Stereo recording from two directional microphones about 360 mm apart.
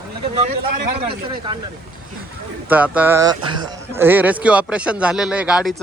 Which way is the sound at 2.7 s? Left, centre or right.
Centre.